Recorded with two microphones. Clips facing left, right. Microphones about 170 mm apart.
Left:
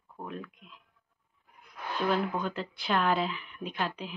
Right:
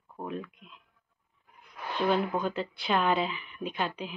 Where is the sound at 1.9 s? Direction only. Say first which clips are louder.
Right 2 dB; centre (ahead or behind).